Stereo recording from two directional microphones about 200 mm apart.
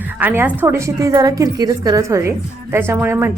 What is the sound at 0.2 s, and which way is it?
Speech, 10° right (ahead or behind).